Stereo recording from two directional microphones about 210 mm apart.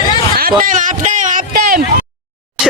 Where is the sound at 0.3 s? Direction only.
45° right (ahead or behind).